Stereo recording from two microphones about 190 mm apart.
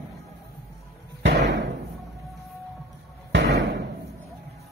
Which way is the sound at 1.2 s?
70° right (ahead or behind).